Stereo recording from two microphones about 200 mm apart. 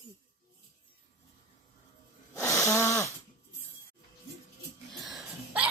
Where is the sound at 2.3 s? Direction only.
15° left (ahead or behind).